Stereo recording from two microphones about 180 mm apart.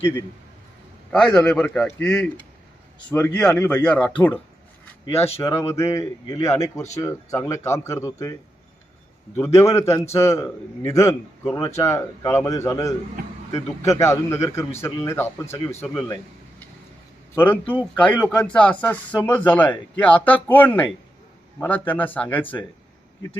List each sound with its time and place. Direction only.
0.0 s a man's voice: 10° left (ahead or behind)
5.4 s speech: 15° left (ahead or behind)
9.4 s speech: 15° left (ahead or behind)
17.3 s speech: 10° left (ahead or behind)